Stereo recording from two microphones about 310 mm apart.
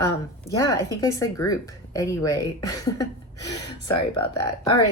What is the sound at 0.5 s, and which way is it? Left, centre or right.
A woman's voice, centre.